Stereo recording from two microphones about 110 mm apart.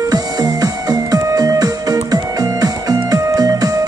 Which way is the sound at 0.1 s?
35° right (ahead or behind).